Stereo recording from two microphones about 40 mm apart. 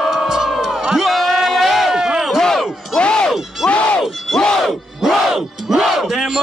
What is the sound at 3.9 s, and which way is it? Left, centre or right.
Battle cry, centre.